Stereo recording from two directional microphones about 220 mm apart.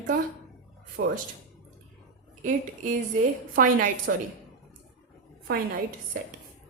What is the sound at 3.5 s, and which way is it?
Speech, 40° right (ahead or behind).